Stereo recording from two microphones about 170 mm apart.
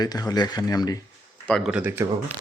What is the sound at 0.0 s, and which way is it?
Speech, 25° left (ahead or behind).